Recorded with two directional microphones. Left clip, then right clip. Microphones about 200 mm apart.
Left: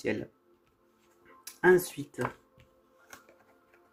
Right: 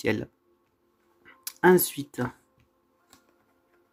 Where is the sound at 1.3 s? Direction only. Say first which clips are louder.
Right 3 dB; 50° right (ahead or behind).